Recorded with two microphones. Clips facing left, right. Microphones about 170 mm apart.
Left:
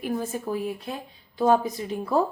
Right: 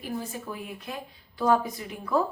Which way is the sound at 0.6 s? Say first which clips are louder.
Left 6 dB; 30° left (ahead or behind).